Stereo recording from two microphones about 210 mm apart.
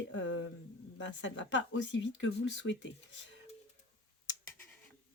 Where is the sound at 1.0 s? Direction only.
60° left (ahead or behind).